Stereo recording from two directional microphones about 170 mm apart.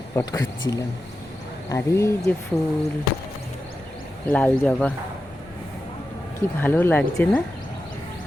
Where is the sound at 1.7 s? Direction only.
15° left (ahead or behind).